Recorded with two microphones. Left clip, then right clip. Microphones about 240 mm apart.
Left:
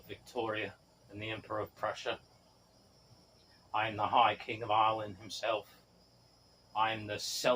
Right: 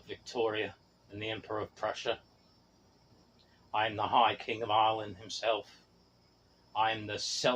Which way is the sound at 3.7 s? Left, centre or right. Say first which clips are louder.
Right 2 dB; right.